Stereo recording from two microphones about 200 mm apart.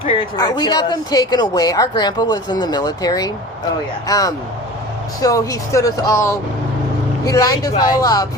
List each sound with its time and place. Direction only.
0.1 s speech: 20° left (ahead or behind)